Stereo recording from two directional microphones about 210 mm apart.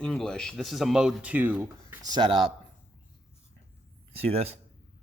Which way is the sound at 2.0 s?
20° right (ahead or behind).